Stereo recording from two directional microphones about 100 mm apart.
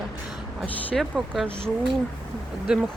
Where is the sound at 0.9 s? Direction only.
5° left (ahead or behind).